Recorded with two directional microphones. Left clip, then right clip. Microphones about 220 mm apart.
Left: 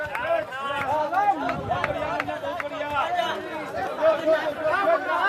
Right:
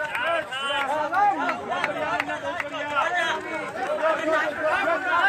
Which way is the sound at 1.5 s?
50° right (ahead or behind).